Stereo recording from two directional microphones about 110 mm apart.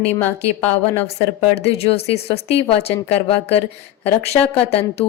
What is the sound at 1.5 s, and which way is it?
Speech, 65° left (ahead or behind).